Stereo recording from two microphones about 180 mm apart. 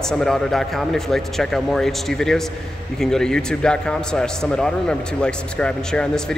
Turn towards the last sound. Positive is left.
turn(degrees=5)  # may be behind; listen again after turning